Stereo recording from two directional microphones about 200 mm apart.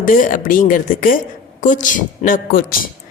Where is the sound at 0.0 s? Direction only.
40° left (ahead or behind).